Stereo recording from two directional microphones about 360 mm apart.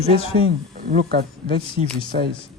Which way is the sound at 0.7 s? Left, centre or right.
Right.